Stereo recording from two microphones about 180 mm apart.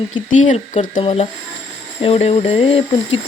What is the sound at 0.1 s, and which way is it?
Speech, 45° left (ahead or behind).